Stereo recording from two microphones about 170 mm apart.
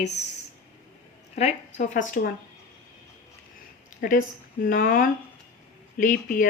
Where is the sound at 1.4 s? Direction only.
40° left (ahead or behind).